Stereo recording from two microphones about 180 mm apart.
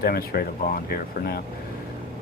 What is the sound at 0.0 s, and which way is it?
Speech, 55° left (ahead or behind).